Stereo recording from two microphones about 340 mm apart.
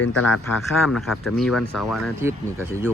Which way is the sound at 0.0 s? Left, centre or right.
Left.